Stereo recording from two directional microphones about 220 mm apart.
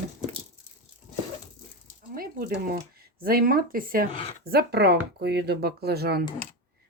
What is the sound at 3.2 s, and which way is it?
Speech, 45° right (ahead or behind).